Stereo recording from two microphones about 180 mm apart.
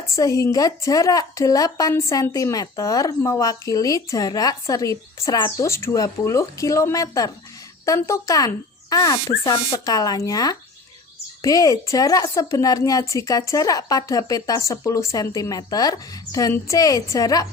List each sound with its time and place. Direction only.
0.1 s a woman's voice: 20° left (ahead or behind)